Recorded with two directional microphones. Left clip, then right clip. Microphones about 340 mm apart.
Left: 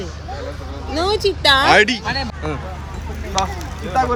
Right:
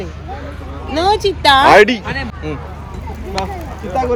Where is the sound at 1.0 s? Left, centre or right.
Right.